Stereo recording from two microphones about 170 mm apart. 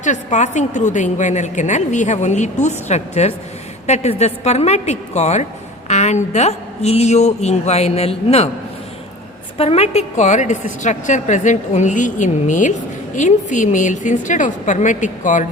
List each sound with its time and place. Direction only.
0.0 s a woman's voice: 45° left (ahead or behind)
9.6 s a woman's voice: 35° left (ahead or behind)